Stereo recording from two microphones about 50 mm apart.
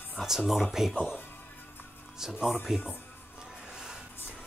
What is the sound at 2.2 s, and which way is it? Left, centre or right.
Speech, centre.